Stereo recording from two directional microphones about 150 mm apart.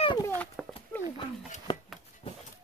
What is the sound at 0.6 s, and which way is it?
Horse, centre (ahead or behind).